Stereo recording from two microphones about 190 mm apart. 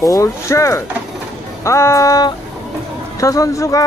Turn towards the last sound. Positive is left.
turn(degrees=15)  # may be behind; listen again after turning